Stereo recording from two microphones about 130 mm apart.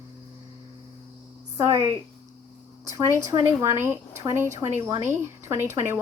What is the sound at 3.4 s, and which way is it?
A woman's voice, 20° right (ahead or behind).